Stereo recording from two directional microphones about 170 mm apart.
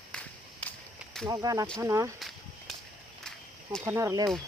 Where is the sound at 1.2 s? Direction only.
20° right (ahead or behind).